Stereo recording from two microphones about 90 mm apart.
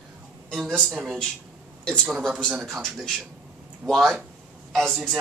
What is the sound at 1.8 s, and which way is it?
A woman's voice, 10° left (ahead or behind).